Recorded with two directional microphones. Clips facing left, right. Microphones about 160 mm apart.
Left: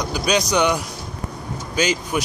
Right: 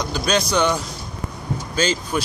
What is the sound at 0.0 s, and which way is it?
Speech, 10° left (ahead or behind).